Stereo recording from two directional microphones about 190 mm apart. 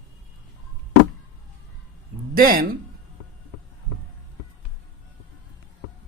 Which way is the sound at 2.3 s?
50° right (ahead or behind).